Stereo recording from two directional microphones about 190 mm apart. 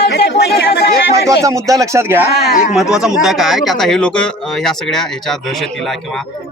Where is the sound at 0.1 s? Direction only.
60° left (ahead or behind).